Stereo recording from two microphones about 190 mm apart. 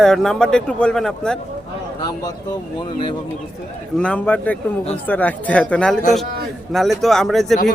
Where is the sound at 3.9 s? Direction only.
5° left (ahead or behind).